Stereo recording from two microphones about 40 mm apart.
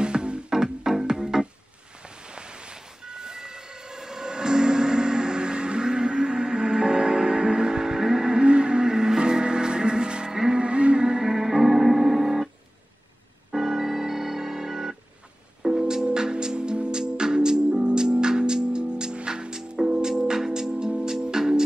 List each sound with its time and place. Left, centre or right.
0.0 s music: right
0.5 s music: centre
2.2 s train: right; by 12.4 s centre
13.5 s organ: centre
15.8 s music: centre